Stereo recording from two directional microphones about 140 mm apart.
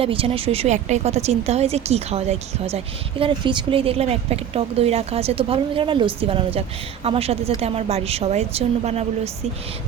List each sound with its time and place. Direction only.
0.0 s a woman's voice: 40° right (ahead or behind)